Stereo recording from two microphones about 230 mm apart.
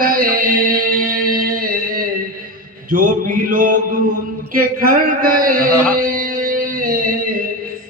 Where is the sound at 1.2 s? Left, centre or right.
Right.